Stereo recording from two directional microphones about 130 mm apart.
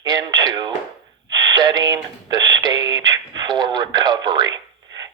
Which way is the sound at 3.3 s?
35° right (ahead or behind).